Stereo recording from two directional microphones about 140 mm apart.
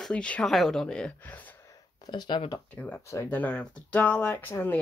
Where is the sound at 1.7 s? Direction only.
30° left (ahead or behind).